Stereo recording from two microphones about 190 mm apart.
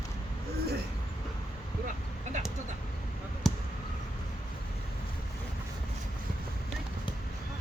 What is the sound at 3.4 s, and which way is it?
Basketball bounce, centre (ahead or behind).